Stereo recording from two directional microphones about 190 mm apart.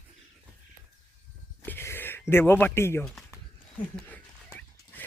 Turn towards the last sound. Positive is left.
turn(degrees=10)  # may be behind; listen again after turning